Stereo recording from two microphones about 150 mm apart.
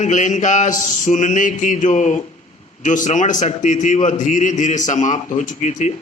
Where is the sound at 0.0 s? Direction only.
55° left (ahead or behind).